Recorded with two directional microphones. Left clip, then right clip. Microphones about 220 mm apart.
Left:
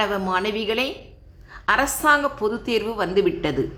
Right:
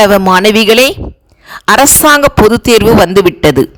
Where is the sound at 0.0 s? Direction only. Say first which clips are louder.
Right 17 dB; 45° right (ahead or behind).